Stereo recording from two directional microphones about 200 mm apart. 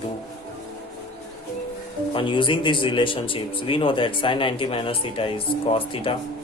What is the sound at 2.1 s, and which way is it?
Speech, 25° left (ahead or behind).